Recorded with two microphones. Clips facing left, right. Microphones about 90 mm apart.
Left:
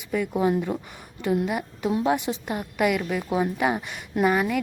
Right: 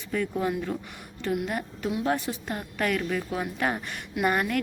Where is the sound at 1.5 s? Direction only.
5° left (ahead or behind).